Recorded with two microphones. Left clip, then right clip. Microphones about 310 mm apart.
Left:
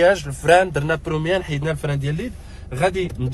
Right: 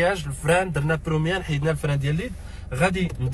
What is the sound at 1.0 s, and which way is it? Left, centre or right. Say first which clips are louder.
Speech: left 4 dB; centre.